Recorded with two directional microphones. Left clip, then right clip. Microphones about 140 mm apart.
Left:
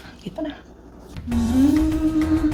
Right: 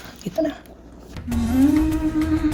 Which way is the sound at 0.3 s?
90° right.